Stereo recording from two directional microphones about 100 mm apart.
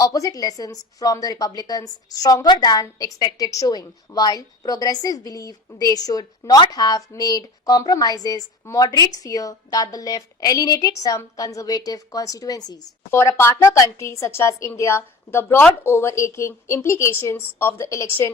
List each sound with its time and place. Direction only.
0.0 s a woman's voice: 35° left (ahead or behind)
13.1 s a woman's voice: 30° left (ahead or behind)